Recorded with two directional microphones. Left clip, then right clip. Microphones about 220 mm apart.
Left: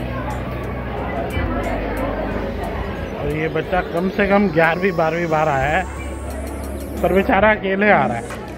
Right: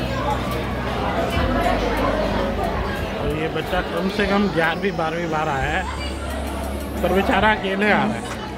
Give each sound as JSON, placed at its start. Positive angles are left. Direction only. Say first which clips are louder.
{"t": 3.3, "sound": "speech", "louder": "left 6 dB", "side_deg": 15}
{"t": 7.0, "sound": "speech", "louder": "left 3 dB", "side_deg": 20}